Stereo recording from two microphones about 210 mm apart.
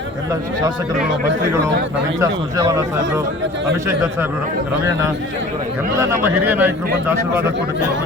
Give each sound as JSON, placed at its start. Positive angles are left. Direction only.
{"t": 2.2, "sound": "a man's voice", "side_deg": -15}
{"t": 3.8, "sound": "a man's voice", "side_deg": -15}
{"t": 6.0, "sound": "a man's voice", "side_deg": -10}